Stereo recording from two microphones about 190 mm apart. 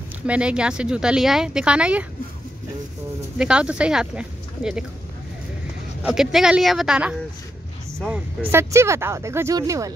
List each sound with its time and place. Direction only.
0.3 s speech: 5° right (ahead or behind)
3.3 s speech: 5° right (ahead or behind)
6.0 s speech: 5° right (ahead or behind); by 9.9 s 20° right (ahead or behind)